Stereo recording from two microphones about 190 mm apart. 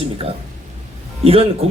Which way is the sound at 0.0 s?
30° right (ahead or behind).